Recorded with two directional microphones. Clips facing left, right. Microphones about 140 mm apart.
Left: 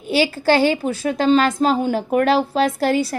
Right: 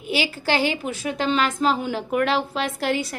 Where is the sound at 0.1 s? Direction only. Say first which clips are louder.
Left 7 dB; 35° left (ahead or behind).